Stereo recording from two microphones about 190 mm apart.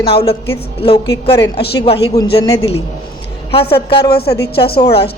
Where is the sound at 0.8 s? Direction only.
30° left (ahead or behind).